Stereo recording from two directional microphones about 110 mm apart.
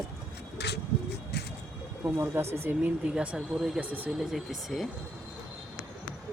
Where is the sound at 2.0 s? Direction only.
20° right (ahead or behind).